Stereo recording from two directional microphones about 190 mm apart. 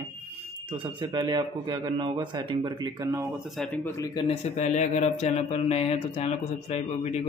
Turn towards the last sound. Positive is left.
turn(degrees=35)  # may be behind; listen again after turning